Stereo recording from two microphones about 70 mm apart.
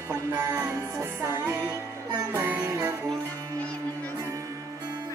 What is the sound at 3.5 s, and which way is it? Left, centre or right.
Music, left.